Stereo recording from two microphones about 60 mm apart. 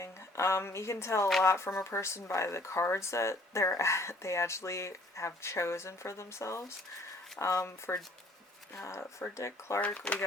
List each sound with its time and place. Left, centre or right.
0.0 s speech: left
9.8 s speech: left